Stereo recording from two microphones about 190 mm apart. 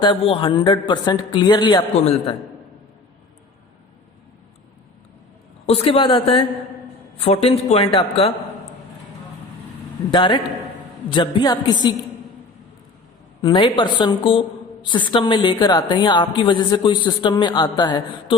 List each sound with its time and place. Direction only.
0.0 s a woman's voice: 25° left (ahead or behind)
5.6 s a woman's voice: 30° left (ahead or behind)
10.1 s a woman's voice: 25° left (ahead or behind)
13.4 s a woman's voice: 25° left (ahead or behind)